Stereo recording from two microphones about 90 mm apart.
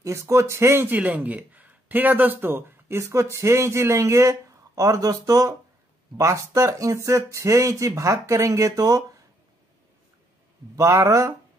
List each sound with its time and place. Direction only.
0.0 s speech: 35° right (ahead or behind)
10.8 s speech: 35° right (ahead or behind)